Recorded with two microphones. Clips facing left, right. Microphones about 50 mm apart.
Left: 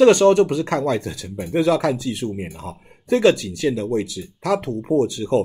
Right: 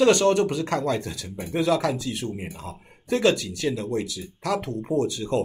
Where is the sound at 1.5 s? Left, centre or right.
Left.